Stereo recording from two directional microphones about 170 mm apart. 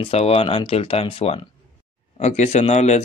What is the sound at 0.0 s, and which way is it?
Speech, 35° left (ahead or behind).